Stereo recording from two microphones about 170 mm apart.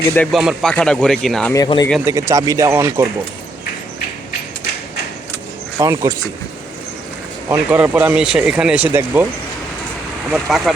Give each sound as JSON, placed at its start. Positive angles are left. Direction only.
{"t": 0.3, "sound": "speech", "side_deg": 0}
{"t": 1.5, "sound": "speech", "side_deg": 20}
{"t": 2.0, "sound": "speech", "side_deg": -15}
{"t": 5.7, "sound": "speech", "side_deg": -15}
{"t": 7.5, "sound": "speech", "side_deg": -10}
{"t": 10.5, "sound": "speech", "side_deg": 0}